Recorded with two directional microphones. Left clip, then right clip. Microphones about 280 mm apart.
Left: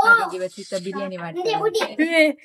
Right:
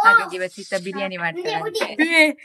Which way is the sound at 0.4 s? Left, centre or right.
Centre.